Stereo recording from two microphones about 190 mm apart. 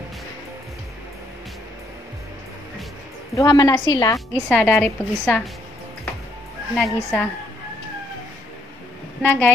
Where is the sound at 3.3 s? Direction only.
20° left (ahead or behind).